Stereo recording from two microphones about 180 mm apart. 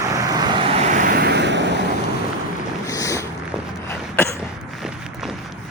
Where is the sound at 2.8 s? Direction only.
20° left (ahead or behind).